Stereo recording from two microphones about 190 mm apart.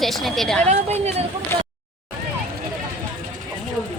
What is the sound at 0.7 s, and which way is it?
Speech, 35° right (ahead or behind).